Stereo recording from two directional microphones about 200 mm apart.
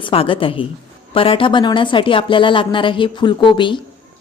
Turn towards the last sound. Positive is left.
turn(degrees=25)  # may be behind; listen again after turning